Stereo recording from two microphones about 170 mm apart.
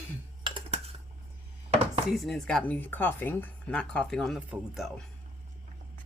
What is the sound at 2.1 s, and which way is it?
Speech, centre (ahead or behind).